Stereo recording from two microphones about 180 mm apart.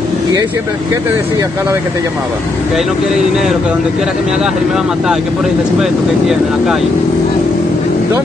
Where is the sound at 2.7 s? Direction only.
Centre (ahead or behind).